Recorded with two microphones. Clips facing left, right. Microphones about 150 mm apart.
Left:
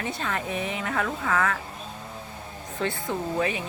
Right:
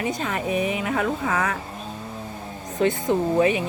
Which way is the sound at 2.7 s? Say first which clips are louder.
Right 8 dB; 20° right (ahead or behind).